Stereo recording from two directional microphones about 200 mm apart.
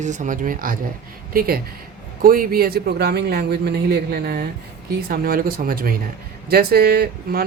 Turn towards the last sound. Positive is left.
turn(degrees=-50)  # may be behind; listen again after turning